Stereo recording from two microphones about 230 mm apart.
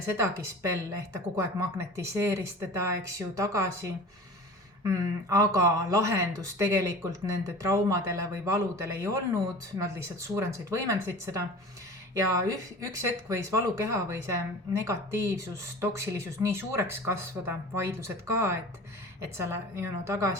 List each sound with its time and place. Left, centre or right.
0.2 s speech: centre